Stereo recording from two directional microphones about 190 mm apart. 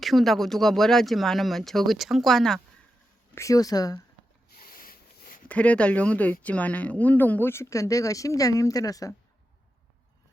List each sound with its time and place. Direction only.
0.0 s speech: centre (ahead or behind)
3.3 s speech: 15° left (ahead or behind)
4.5 s sniff: 50° left (ahead or behind)
5.5 s speech: 5° left (ahead or behind)